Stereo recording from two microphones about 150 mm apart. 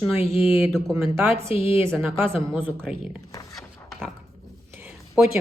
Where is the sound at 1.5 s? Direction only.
40° left (ahead or behind).